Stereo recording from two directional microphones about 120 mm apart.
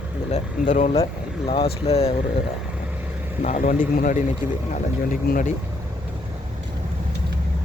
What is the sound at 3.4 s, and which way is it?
Speech, 90° left.